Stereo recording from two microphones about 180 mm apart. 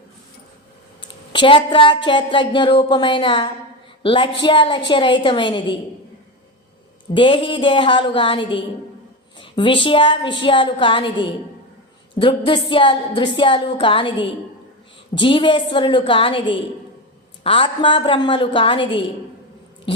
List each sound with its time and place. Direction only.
1.0 s speech: 25° left (ahead or behind)
7.1 s speech: 30° left (ahead or behind)
12.5 s speech: 25° left (ahead or behind)